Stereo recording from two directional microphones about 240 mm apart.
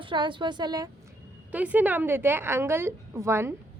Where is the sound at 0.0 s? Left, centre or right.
Centre.